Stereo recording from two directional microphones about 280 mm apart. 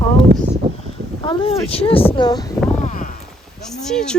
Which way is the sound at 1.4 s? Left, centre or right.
Left.